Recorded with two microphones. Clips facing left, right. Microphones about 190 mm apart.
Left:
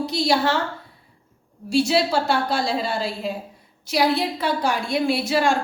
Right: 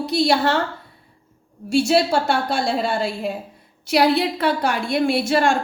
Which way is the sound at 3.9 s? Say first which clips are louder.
Right 3 dB; 65° right (ahead or behind).